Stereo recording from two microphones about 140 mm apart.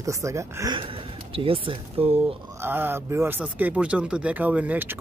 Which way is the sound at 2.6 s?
15° right (ahead or behind).